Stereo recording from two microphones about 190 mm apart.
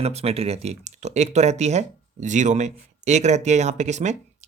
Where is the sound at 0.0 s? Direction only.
30° right (ahead or behind).